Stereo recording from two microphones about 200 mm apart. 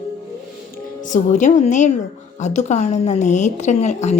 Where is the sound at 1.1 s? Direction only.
40° left (ahead or behind).